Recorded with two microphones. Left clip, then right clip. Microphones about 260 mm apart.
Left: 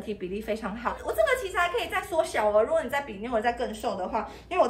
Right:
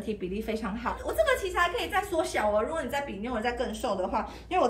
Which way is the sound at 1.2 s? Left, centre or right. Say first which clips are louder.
Left 1 dB; centre.